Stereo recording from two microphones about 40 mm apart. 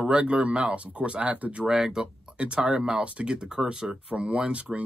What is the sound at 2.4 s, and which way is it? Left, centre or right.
Speech, right.